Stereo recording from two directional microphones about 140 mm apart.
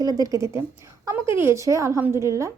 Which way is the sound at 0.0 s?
25° right (ahead or behind).